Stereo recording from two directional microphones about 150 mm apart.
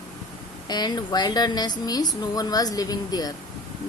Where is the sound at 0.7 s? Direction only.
30° left (ahead or behind).